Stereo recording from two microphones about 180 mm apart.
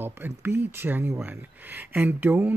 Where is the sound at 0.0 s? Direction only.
10° right (ahead or behind).